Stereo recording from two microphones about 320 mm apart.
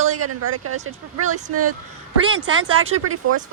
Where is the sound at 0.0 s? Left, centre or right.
Right.